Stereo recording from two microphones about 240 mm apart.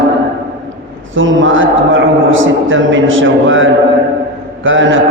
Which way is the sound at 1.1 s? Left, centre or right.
Right.